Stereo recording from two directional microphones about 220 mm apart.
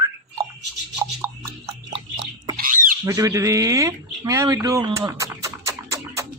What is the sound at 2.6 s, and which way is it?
Squawk, 40° right (ahead or behind).